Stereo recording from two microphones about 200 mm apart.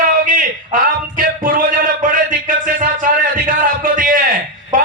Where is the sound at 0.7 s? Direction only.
45° right (ahead or behind).